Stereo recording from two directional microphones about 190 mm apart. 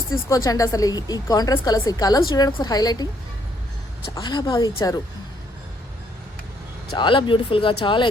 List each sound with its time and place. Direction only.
0.1 s a woman's voice: 15° left (ahead or behind)
4.1 s a woman's voice: 20° left (ahead or behind)
6.9 s a woman's voice: 25° left (ahead or behind)